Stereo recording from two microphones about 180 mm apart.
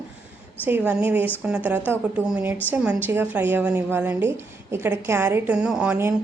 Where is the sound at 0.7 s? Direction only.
10° right (ahead or behind).